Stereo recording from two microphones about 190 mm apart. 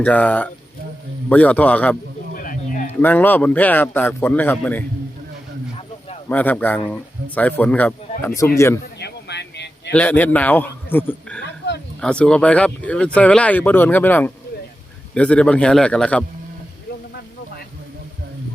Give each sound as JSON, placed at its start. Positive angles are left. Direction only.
{"t": 0.0, "sound": "speech", "side_deg": 10}
{"t": 2.3, "sound": "a sound", "side_deg": 45}
{"t": 3.0, "sound": "speech", "side_deg": 10}
{"t": 6.2, "sound": "speech", "side_deg": 10}
{"t": 9.0, "sound": "a sound", "side_deg": 65}
{"t": 9.9, "sound": "a man's voice", "side_deg": 10}